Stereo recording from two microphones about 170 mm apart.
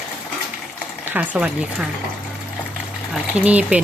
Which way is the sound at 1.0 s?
10° right (ahead or behind).